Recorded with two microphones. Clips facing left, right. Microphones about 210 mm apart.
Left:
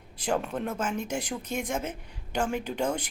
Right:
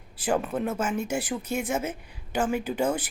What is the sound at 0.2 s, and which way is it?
Speech, 5° right (ahead or behind).